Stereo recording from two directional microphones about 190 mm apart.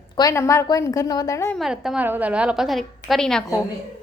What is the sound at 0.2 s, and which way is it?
A woman's voice, 15° left (ahead or behind).